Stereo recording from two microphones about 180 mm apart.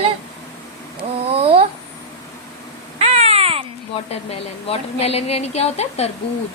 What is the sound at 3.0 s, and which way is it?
Baby cry, 35° right (ahead or behind).